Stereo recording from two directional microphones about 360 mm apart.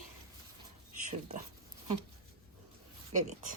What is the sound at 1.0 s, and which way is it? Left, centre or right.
Speech, centre.